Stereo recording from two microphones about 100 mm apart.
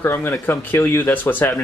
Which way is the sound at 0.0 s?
20° left (ahead or behind).